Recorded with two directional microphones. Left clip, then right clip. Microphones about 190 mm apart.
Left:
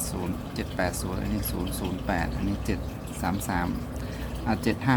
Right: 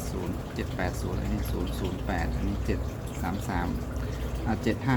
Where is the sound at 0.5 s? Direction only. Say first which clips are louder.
Left 4 dB; 20° left (ahead or behind).